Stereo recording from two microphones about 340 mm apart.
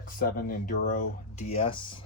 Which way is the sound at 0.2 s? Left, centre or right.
Left.